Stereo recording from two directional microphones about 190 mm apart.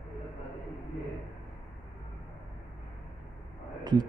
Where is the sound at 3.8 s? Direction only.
20° right (ahead or behind).